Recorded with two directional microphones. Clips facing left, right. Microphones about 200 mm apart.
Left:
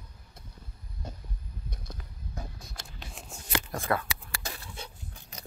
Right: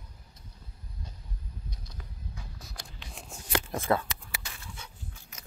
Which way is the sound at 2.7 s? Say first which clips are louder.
Left 1 dB; 30° left (ahead or behind).